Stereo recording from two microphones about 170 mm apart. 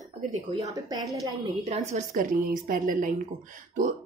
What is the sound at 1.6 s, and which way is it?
A woman's voice, 40° right (ahead or behind).